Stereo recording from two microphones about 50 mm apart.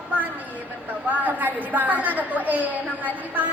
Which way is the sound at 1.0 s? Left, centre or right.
Right.